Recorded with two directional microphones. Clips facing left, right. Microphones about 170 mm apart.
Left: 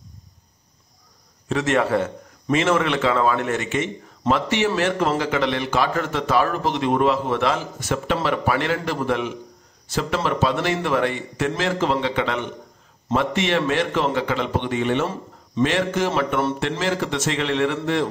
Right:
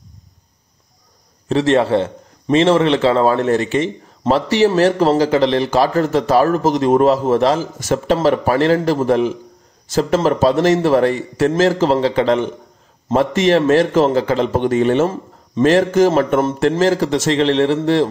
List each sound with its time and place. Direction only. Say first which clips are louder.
1.5 s a man's voice: right 6 dB; 30° right (ahead or behind)